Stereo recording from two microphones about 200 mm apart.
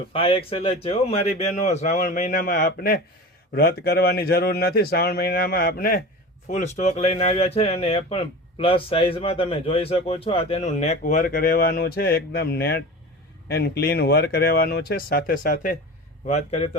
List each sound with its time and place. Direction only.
0.1 s a man's voice: 25° left (ahead or behind); by 6.0 s 45° left (ahead or behind)
6.5 s a man's voice: 35° left (ahead or behind)